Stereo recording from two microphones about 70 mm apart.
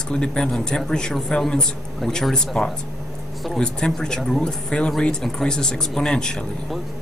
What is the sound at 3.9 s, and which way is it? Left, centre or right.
Speech, centre.